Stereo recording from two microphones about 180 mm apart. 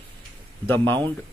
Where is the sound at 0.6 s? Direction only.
10° left (ahead or behind).